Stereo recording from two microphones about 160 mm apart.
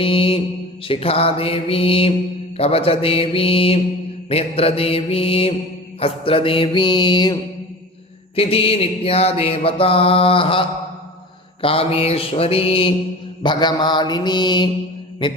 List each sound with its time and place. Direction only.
0.0 s mantra: 35° left (ahead or behind)
8.4 s mantra: 35° left (ahead or behind)